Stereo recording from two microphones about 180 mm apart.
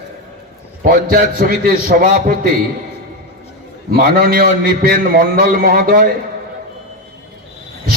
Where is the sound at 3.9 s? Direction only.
55° right (ahead or behind).